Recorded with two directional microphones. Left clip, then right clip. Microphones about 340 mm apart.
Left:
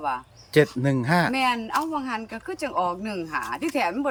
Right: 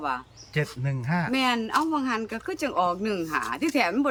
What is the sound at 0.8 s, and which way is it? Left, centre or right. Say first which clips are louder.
Speech: left 8 dB; left.